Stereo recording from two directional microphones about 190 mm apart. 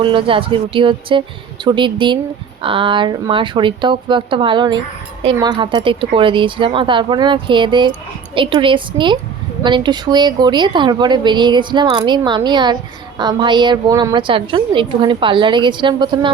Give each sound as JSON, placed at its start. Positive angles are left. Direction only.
{"t": 0.0, "sound": "a woman's voice", "side_deg": -25}